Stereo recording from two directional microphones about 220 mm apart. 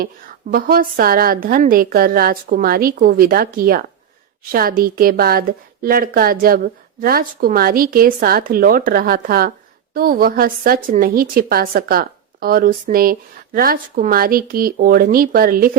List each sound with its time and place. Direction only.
0.5 s a woman's voice: 40° right (ahead or behind)